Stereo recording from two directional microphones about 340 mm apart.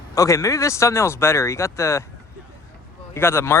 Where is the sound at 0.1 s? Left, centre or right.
Centre.